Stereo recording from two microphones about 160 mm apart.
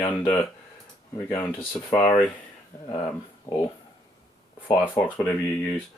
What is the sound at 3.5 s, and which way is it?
Speech, 20° left (ahead or behind).